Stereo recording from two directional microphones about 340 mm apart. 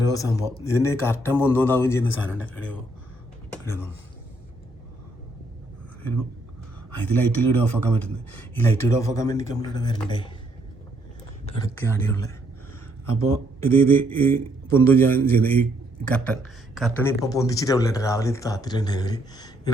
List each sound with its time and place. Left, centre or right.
0.1 s speech: centre
3.7 s speech: centre
6.9 s speech: centre
11.8 s speech: centre